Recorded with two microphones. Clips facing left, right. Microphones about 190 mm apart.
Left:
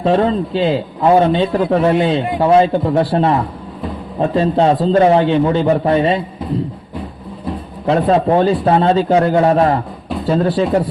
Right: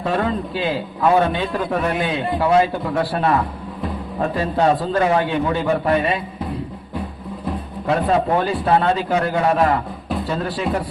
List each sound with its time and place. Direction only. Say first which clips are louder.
0.0 s a man's voice: left 7 dB; 25° left (ahead or behind)
7.9 s a man's voice: left 5 dB; 25° left (ahead or behind)